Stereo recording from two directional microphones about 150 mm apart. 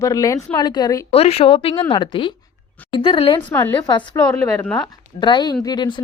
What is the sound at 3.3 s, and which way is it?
Speech, 15° left (ahead or behind).